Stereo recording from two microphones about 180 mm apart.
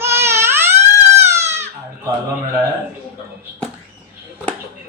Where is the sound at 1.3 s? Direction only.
15° right (ahead or behind).